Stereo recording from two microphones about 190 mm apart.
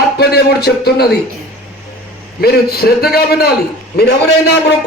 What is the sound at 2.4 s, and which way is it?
Speech, 55° left (ahead or behind).